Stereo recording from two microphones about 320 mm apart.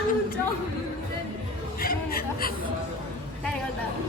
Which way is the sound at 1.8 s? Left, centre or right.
Left.